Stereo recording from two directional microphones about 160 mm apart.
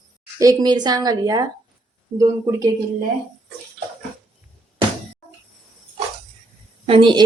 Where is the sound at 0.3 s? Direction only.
25° right (ahead or behind).